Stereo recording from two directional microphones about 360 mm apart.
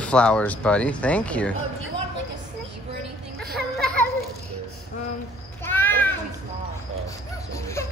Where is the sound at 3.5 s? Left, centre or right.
Centre.